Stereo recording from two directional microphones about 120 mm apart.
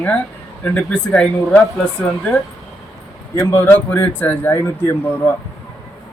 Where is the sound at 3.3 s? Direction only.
20° left (ahead or behind).